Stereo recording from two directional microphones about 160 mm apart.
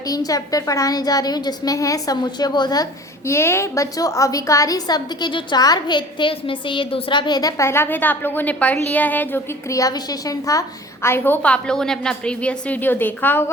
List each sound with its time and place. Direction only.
0.1 s a woman's voice: 20° left (ahead or behind)
3.2 s a woman's voice: 15° left (ahead or behind)